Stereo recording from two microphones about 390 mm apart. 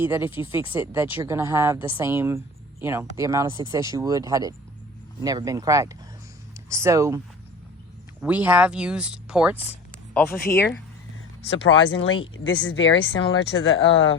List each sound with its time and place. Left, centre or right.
0.0 s speech: centre
0.3 s speech: centre
0.7 s speech: centre
8.2 s speech: centre
11.7 s speech: left